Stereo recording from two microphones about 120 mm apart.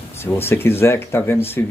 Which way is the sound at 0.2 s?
20° left (ahead or behind).